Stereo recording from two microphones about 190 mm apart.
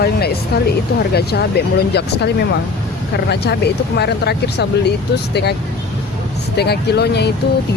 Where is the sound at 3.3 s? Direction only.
60° left (ahead or behind).